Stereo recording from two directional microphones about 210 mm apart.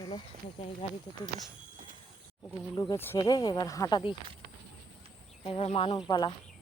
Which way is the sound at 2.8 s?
15° left (ahead or behind).